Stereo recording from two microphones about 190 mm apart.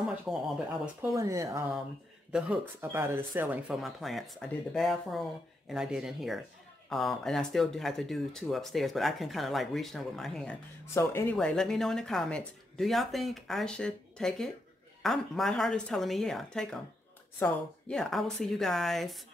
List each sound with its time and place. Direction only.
0.0 s a sound: 5° right (ahead or behind)
1.0 s speech: 15° right (ahead or behind); by 11.3 s 15° left (ahead or behind)
11.3 s speech: 5° left (ahead or behind)